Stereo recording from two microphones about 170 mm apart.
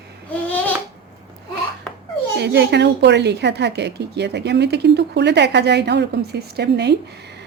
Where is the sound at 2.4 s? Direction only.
80° right.